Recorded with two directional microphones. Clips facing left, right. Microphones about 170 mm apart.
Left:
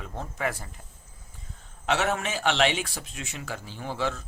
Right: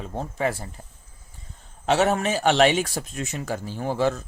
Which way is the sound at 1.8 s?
35° right (ahead or behind).